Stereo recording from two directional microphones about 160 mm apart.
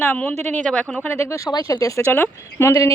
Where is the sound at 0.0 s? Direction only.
10° left (ahead or behind).